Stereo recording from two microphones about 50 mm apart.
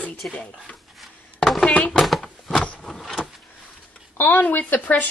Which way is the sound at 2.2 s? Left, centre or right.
Centre.